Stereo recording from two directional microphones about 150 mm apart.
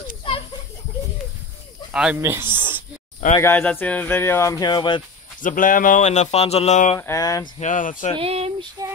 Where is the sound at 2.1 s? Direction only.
15° right (ahead or behind).